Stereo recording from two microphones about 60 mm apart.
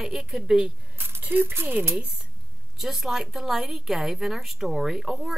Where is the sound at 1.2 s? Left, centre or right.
Right.